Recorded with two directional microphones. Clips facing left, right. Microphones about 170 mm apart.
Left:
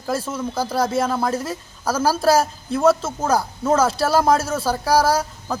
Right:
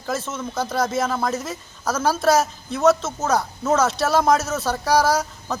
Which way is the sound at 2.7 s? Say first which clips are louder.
Left 1 dB; 10° left (ahead or behind).